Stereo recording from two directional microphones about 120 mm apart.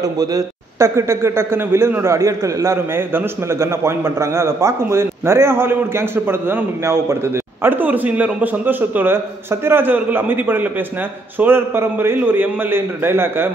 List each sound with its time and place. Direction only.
0.0 s a man's voice: 30° right (ahead or behind)